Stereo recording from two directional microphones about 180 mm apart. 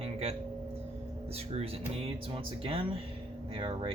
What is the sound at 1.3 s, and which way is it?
Speech, 35° right (ahead or behind).